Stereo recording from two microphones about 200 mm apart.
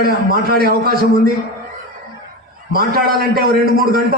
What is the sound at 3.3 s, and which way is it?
Speech, 50° right (ahead or behind).